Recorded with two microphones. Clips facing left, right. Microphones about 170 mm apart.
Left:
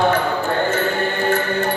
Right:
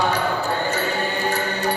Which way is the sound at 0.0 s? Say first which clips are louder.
Left 4 dB; 55° left (ahead or behind).